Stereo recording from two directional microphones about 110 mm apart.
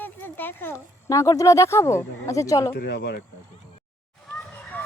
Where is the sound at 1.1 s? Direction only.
30° left (ahead or behind).